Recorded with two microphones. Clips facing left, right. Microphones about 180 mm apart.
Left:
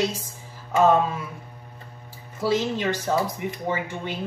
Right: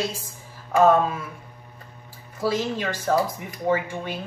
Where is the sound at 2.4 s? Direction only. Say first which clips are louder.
Left 1 dB; 20° left (ahead or behind).